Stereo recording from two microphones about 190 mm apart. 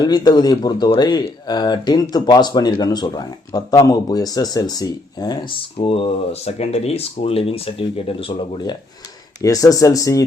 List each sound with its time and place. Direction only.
0.0 s speech: 20° left (ahead or behind)